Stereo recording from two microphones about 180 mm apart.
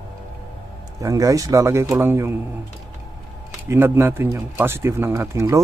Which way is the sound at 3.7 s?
10° right (ahead or behind).